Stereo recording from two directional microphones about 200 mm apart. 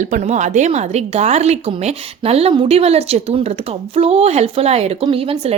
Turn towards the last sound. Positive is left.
turn(degrees=-30)  # may be behind; listen again after turning